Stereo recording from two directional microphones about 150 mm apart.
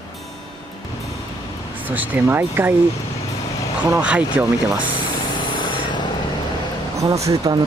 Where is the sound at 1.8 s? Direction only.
10° right (ahead or behind).